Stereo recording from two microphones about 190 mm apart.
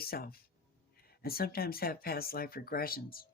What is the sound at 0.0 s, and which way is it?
Speech, 55° left (ahead or behind).